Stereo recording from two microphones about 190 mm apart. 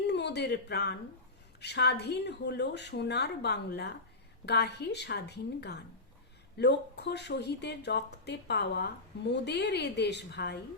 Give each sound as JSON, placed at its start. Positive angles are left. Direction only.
{"t": 0.1, "sound": "speech", "side_deg": 65}